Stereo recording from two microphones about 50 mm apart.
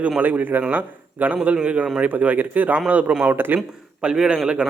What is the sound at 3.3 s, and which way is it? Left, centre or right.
Speech, right.